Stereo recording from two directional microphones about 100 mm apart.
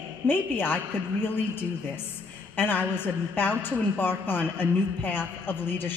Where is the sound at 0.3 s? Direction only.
20° left (ahead or behind).